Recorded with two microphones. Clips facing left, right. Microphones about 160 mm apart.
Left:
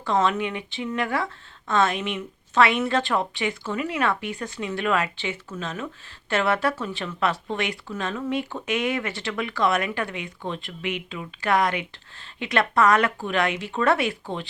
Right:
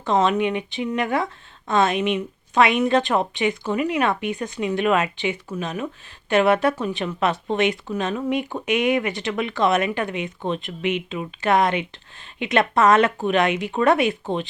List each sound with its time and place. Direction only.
0.0 s speech: 20° right (ahead or behind)